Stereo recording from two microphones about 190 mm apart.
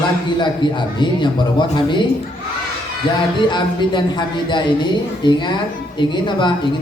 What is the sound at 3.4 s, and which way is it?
A man's voice, 25° left (ahead or behind).